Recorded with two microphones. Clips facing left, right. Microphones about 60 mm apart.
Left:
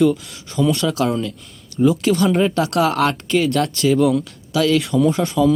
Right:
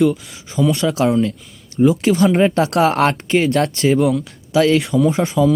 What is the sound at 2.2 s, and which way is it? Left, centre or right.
Speech, right.